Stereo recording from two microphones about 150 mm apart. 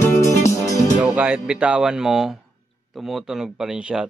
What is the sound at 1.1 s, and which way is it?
A man's voice, 10° right (ahead or behind).